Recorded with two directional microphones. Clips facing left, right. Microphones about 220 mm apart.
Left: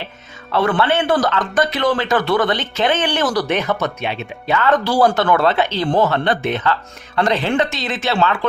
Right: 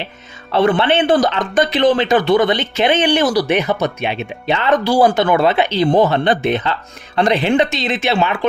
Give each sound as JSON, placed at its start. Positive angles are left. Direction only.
{"t": 0.5, "sound": "speech", "side_deg": -20}